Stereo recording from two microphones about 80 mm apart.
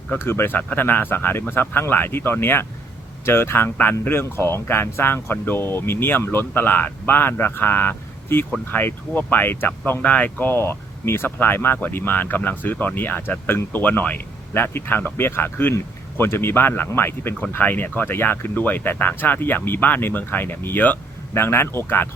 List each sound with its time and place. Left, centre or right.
0.1 s speech: left